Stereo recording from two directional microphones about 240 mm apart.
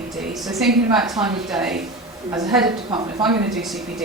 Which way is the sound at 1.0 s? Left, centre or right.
Centre.